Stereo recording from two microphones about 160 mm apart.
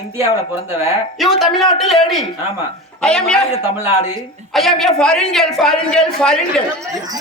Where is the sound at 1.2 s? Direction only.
Centre (ahead or behind).